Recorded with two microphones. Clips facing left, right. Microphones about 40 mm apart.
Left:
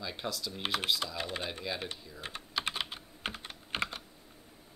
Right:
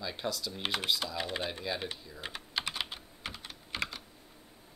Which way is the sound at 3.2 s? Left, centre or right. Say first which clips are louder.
Left 4 dB; left.